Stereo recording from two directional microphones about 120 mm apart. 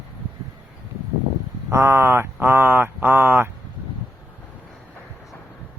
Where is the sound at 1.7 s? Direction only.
20° right (ahead or behind).